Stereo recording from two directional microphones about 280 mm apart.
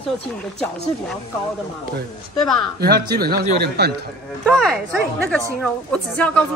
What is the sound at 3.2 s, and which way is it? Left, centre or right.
Speech, right.